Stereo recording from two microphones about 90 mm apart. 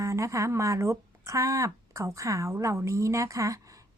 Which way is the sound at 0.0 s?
35° right (ahead or behind).